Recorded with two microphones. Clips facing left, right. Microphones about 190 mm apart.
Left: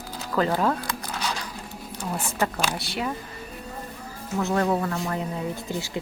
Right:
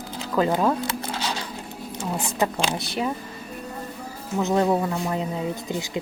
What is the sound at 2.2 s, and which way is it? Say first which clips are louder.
Speech: right 2 dB; 15° right (ahead or behind).